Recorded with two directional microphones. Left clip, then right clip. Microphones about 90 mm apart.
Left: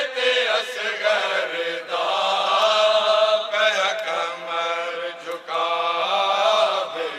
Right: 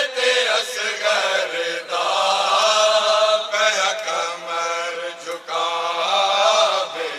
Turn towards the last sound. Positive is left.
turn(degrees=25)  # may be behind; listen again after turning